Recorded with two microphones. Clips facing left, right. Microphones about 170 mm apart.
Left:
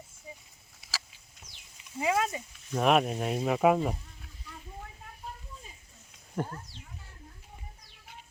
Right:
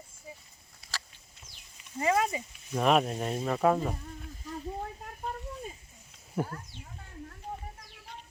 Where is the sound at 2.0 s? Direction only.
5° left (ahead or behind).